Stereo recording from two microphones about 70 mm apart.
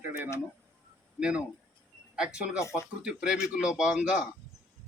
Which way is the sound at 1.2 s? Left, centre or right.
Centre.